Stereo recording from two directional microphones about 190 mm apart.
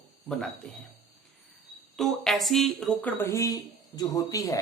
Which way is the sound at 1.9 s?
Centre (ahead or behind).